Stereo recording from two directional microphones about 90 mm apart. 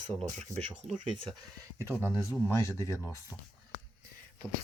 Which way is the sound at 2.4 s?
30° left (ahead or behind).